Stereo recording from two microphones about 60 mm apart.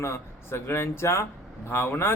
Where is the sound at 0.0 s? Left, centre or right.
Left.